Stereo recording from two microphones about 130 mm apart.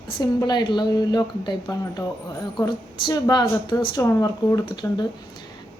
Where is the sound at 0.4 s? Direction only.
35° left (ahead or behind).